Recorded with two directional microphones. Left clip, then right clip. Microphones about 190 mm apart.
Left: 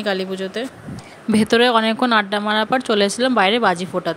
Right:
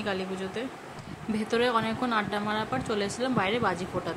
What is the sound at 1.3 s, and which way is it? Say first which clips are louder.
Speech: left 11 dB; 45° left (ahead or behind).